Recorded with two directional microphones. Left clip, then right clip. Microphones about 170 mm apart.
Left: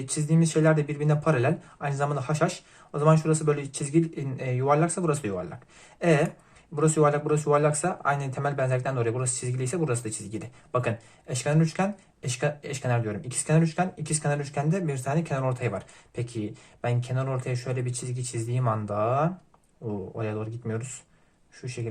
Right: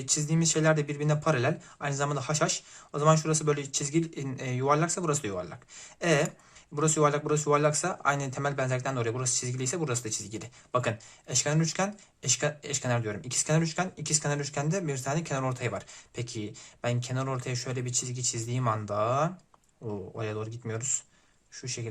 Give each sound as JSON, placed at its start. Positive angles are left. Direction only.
{"t": 0.0, "sound": "speech", "side_deg": -25}